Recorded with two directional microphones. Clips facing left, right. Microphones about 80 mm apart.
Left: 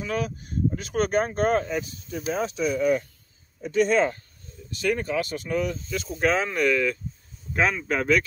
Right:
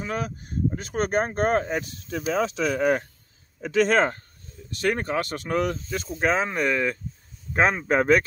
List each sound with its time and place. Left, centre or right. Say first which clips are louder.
0.0 s speech: left 1 dB; right
2.0 s speech: right 4 dB; right
3.6 s speech: right 1 dB; right
4.7 s speech: even; right
6.1 s speech: even; right